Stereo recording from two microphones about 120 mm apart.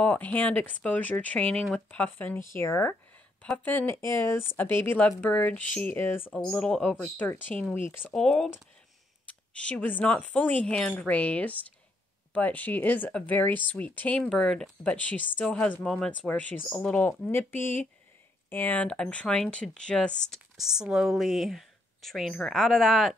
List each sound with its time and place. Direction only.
0.0 s speech: 10° left (ahead or behind)